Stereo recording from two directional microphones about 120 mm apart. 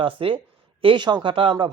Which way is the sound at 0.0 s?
45° right (ahead or behind).